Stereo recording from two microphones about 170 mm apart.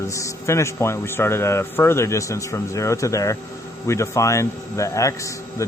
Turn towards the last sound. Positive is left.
turn(degrees=20)  # may be behind; listen again after turning